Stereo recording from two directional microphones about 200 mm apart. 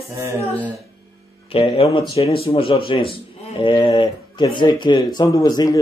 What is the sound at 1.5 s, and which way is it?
A man's voice, 30° left (ahead or behind).